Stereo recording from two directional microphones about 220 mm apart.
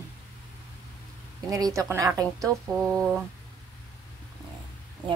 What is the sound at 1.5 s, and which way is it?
A woman's voice, 15° right (ahead or behind).